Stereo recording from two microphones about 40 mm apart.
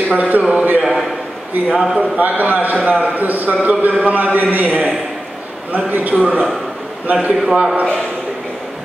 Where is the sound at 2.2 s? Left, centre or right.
Right.